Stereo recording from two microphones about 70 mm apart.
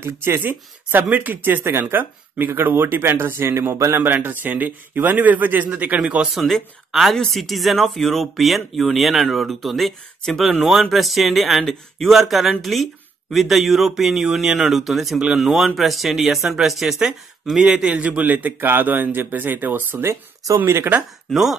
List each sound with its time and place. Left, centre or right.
0.0 s speech: right
0.4 s speech: right
4.0 s speech: right
6.3 s speech: centre; by 20.0 s right
20.5 s speech: right
21.3 s speech: centre